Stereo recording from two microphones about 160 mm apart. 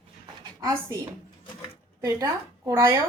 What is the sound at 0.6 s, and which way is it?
Speech, 20° right (ahead or behind).